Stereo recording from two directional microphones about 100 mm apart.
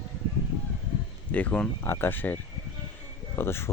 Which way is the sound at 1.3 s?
15° left (ahead or behind).